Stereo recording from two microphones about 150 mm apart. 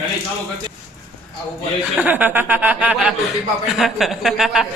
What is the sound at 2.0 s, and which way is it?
A man's voice, 10° right (ahead or behind).